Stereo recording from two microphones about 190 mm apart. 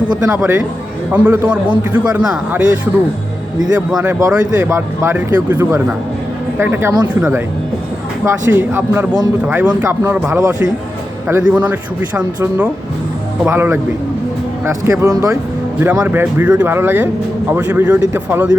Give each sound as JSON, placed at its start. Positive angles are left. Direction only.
{"t": 0.2, "sound": "speech", "side_deg": -10}